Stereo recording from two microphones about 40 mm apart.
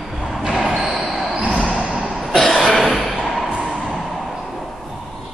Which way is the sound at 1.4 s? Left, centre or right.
Centre.